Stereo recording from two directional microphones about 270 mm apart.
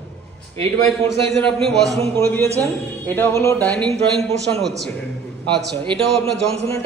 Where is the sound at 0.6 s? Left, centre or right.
Centre.